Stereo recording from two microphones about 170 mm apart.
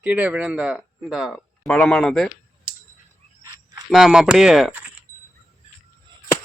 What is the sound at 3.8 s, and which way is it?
Speech, centre (ahead or behind).